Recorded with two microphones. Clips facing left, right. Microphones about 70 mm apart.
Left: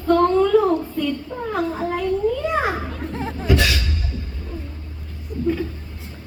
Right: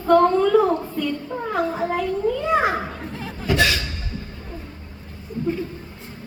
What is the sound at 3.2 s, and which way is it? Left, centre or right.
Chuckle, left.